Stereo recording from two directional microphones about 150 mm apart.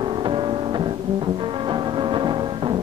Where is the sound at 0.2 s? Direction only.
30° right (ahead or behind).